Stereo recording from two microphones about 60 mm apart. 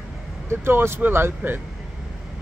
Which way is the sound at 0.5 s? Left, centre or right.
Right.